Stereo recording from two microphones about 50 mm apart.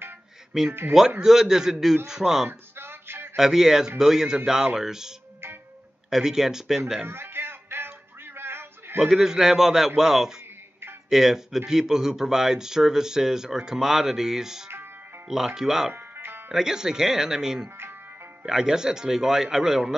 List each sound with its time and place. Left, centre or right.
0.5 s speech: centre
2.7 s music: right
3.3 s speech: centre
7.1 s music: right
9.0 s speech: centre
15.9 s music: right
16.5 s speech: centre